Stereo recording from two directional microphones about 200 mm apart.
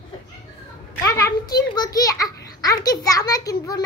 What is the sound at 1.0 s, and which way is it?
A child's voice, 15° left (ahead or behind).